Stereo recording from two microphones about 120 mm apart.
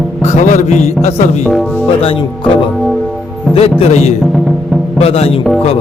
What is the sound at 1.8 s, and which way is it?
Speech, 55° left (ahead or behind).